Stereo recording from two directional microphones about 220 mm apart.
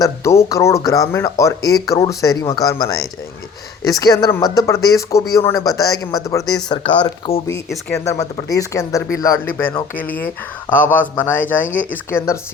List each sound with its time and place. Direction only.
0.0 s speech: 15° left (ahead or behind)
7.7 s speech: 5° left (ahead or behind)
8.0 s speech: 15° left (ahead or behind)